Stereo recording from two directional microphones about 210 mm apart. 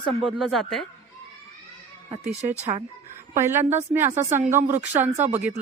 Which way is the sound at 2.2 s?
30° right (ahead or behind).